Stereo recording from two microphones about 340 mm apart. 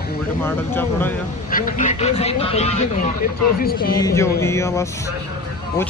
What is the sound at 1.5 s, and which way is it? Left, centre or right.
Speech, left.